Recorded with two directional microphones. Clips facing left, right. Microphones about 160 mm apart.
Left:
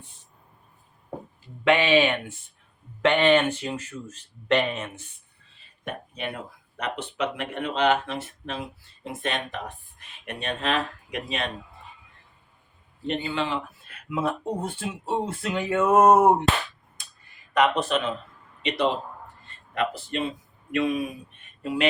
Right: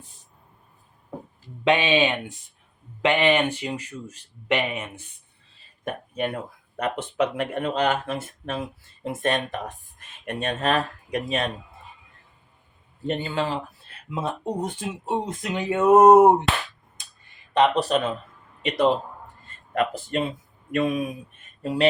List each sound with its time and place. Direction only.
1.6 s speech: 20° right (ahead or behind)
5.5 s a sound: 45° right (ahead or behind)
6.7 s speech: 50° right (ahead or behind)
13.1 s speech: 45° right (ahead or behind); by 16.3 s 20° right (ahead or behind)
17.5 s speech: 30° right (ahead or behind)
19.5 s a sound: 45° right (ahead or behind)
20.7 s speech: 45° right (ahead or behind)